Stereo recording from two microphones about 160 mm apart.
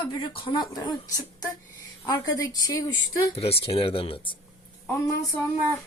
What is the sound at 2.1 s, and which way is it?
Speech, 25° left (ahead or behind).